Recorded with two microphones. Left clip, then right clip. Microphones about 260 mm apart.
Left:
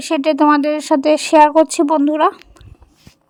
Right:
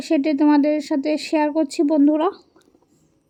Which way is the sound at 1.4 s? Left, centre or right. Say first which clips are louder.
Left 12 dB; left.